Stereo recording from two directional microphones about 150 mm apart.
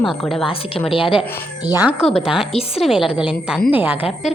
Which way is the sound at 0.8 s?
35° left (ahead or behind).